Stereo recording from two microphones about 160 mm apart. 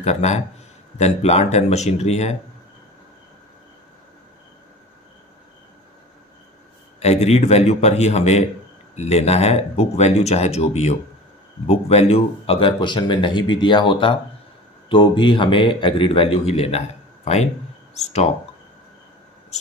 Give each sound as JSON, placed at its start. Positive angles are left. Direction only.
{"t": 0.0, "sound": "speech", "side_deg": 45}
{"t": 7.0, "sound": "a man's voice", "side_deg": 40}